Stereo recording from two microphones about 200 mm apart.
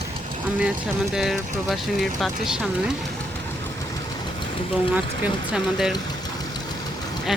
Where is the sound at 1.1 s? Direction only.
Centre (ahead or behind).